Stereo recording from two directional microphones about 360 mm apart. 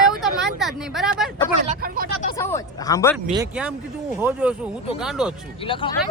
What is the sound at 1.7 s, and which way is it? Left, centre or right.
Speech, right.